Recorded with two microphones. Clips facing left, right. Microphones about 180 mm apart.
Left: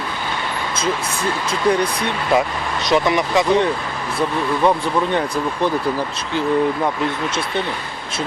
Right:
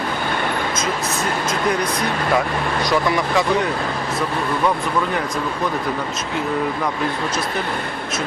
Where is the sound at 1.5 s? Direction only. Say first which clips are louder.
Left 5 dB; 30° left (ahead or behind).